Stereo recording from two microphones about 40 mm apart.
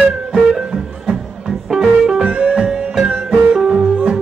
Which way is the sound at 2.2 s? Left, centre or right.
Right.